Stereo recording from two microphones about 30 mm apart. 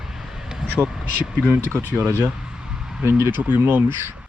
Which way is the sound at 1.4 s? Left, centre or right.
Right.